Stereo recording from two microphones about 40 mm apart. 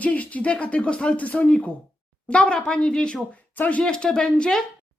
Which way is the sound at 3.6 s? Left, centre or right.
Left.